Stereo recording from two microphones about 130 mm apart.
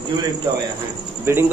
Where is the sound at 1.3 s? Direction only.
20° right (ahead or behind).